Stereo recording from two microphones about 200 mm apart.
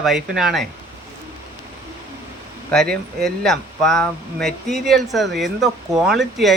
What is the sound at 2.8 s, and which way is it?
Speech, 50° right (ahead or behind).